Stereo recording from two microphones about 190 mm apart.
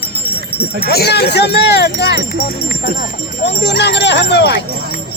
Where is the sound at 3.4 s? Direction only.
65° left (ahead or behind).